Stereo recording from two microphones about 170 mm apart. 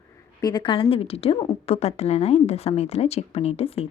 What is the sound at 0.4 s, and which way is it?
A woman's voice, 25° left (ahead or behind).